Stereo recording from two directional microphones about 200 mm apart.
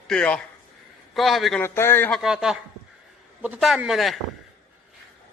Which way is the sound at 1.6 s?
10° left (ahead or behind).